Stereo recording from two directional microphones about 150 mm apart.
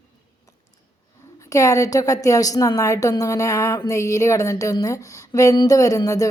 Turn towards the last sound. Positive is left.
turn(degrees=20)  # may be behind; listen again after turning